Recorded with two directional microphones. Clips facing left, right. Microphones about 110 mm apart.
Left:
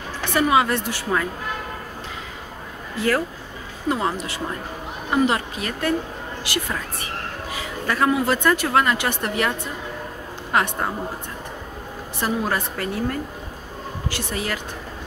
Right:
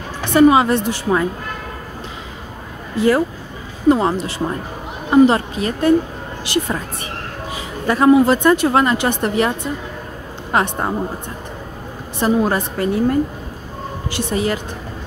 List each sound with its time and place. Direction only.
0.2 s a woman's voice: 25° right (ahead or behind)
3.9 s a woman's voice: 30° right (ahead or behind)
12.2 s a woman's voice: 25° right (ahead or behind)